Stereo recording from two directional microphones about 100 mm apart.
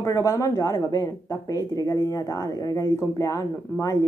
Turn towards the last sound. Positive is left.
turn(degrees=30)  # may be behind; listen again after turning